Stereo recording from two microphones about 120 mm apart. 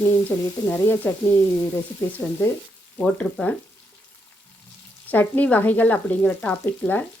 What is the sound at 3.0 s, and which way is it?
Speech, 10° left (ahead or behind).